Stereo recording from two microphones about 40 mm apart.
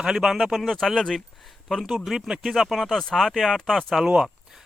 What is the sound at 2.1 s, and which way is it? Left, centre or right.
Speech, centre.